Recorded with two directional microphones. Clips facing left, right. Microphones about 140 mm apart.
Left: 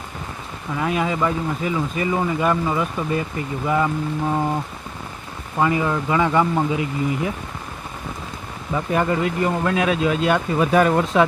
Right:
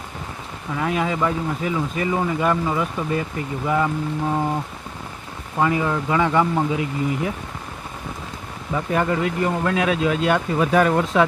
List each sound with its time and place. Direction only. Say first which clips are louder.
0.8 s speech: left 1 dB; 5° left (ahead or behind)
5.5 s speech: left 1 dB; 5° left (ahead or behind)
8.7 s speech: left 1 dB; 15° left (ahead or behind)
10.7 s speech: left 1 dB; 15° left (ahead or behind)